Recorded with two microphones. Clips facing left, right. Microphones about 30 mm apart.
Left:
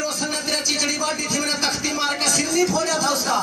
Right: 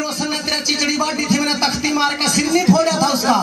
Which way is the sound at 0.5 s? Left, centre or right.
Right.